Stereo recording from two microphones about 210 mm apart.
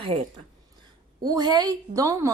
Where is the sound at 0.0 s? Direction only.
25° right (ahead or behind).